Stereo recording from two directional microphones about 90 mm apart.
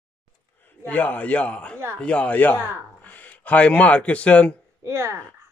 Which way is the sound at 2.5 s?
20° right (ahead or behind).